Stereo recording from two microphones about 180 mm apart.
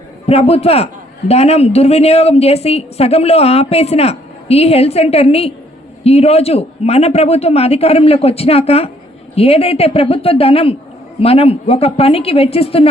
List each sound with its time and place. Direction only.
0.3 s a woman's voice: 35° left (ahead or behind)